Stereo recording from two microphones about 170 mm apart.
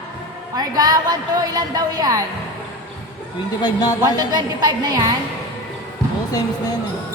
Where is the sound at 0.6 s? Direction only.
20° right (ahead or behind).